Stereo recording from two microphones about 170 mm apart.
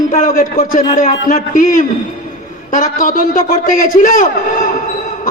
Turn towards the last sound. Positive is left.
turn(degrees=55)  # may be behind; listen again after turning